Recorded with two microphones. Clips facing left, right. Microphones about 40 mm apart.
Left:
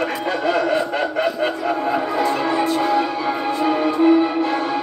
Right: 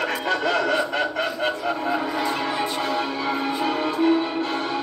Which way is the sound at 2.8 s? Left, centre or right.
Left.